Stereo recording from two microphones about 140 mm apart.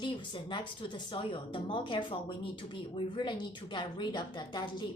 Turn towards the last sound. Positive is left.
turn(degrees=30)  # may be behind; listen again after turning